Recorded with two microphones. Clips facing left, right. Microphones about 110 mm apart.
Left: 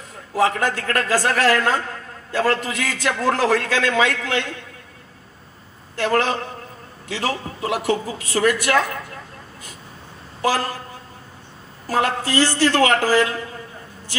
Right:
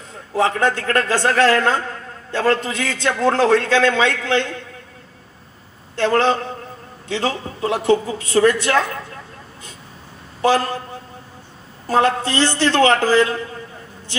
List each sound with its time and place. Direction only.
0.4 s a man's voice: 30° right (ahead or behind)
5.9 s a man's voice: 30° right (ahead or behind)
10.4 s a man's voice: 25° right (ahead or behind)
11.9 s a man's voice: 25° right (ahead or behind)